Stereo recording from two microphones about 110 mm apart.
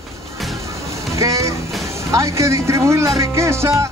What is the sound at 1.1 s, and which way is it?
Speech, 30° right (ahead or behind).